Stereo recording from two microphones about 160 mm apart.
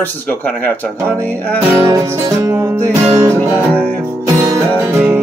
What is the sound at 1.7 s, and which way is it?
Music, 20° right (ahead or behind).